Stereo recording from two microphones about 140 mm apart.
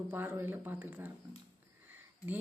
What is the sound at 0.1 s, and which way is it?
A woman's voice, 15° right (ahead or behind).